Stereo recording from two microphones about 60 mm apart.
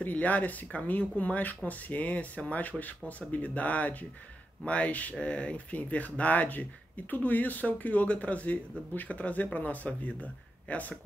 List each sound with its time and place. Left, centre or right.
0.0 s speech: left